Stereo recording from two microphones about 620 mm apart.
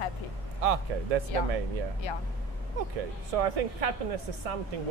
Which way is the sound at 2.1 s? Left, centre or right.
Left.